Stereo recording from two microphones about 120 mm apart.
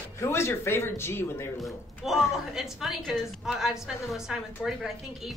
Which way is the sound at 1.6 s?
Centre (ahead or behind).